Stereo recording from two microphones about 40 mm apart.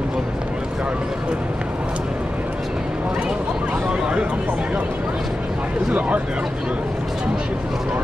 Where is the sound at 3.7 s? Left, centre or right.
Right.